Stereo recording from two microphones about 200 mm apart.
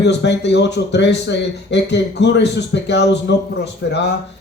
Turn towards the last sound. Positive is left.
turn(degrees=60)  # may be behind; listen again after turning